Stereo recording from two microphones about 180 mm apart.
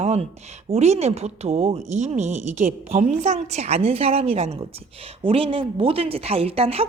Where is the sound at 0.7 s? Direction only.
35° right (ahead or behind).